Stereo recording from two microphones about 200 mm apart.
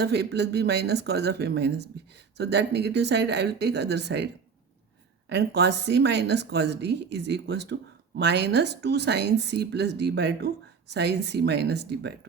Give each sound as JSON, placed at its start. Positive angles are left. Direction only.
{"t": 0.0, "sound": "a woman's voice", "side_deg": -55}
{"t": 5.3, "sound": "a woman's voice", "side_deg": -55}